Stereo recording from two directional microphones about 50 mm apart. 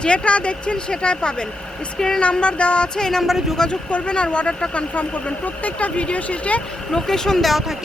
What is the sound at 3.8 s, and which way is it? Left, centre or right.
Speech, left.